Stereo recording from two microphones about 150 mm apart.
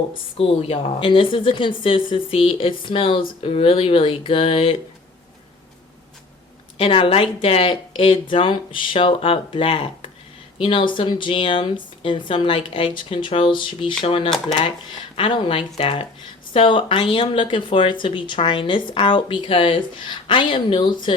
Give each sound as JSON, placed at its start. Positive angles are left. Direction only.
{"t": 0.3, "sound": "speech", "side_deg": 40}
{"t": 6.7, "sound": "speech", "side_deg": 35}